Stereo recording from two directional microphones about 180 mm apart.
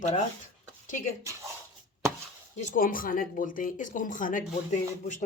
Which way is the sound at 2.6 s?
50° left (ahead or behind).